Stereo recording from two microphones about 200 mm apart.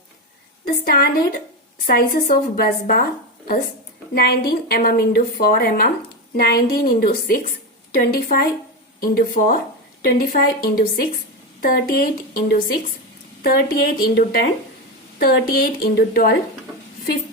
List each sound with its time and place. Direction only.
0.6 s a woman's voice: 50° left (ahead or behind)